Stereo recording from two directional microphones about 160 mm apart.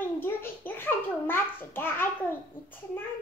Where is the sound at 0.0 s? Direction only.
15° left (ahead or behind).